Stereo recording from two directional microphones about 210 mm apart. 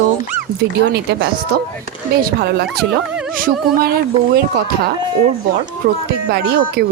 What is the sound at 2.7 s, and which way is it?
Speech, centre (ahead or behind).